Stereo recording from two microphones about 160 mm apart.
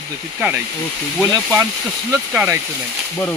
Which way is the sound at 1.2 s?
5° right (ahead or behind).